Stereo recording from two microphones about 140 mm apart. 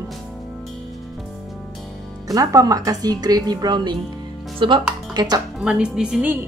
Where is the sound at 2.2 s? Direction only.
25° right (ahead or behind).